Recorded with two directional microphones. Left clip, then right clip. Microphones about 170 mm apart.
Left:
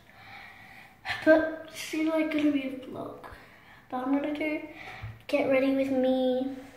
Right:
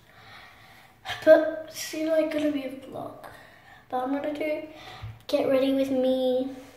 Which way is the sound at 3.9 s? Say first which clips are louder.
Right 2 dB; 15° right (ahead or behind).